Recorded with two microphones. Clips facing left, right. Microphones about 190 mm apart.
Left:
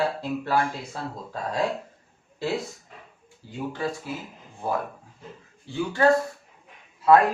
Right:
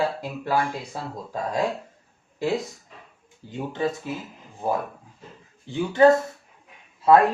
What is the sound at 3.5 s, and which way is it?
Speech, 20° right (ahead or behind).